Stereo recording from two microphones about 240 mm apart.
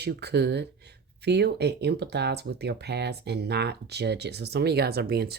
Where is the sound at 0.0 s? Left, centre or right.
Right.